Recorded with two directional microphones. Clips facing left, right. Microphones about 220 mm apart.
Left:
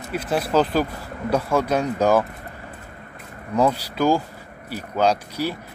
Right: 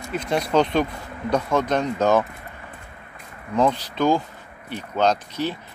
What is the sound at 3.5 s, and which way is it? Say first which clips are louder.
Speech: left 1 dB; 10° left (ahead or behind).